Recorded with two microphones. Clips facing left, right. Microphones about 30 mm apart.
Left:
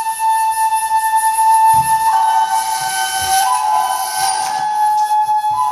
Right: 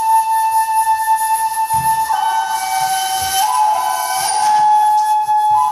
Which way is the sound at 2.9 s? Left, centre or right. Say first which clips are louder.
Right 1 dB; left.